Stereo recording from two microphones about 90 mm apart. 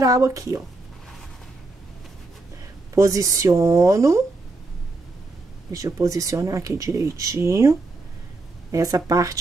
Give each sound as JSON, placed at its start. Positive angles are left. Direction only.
{"t": 0.0, "sound": "speech", "side_deg": -40}
{"t": 2.9, "sound": "speech", "side_deg": -35}
{"t": 5.7, "sound": "speech", "side_deg": -35}
{"t": 8.7, "sound": "speech", "side_deg": -40}